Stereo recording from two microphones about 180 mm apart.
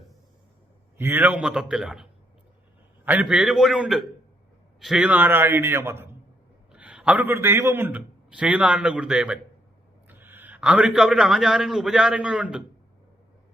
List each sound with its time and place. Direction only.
0.9 s a man's voice: 10° right (ahead or behind)